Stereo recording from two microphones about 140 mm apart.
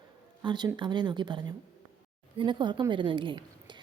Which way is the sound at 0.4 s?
30° right (ahead or behind).